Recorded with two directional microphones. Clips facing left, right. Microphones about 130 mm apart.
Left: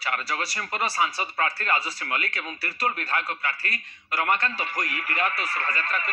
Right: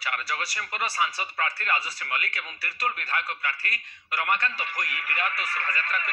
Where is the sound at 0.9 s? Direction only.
35° left (ahead or behind).